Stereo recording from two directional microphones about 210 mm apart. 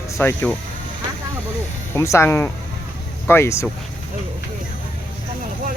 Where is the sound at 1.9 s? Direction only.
15° left (ahead or behind).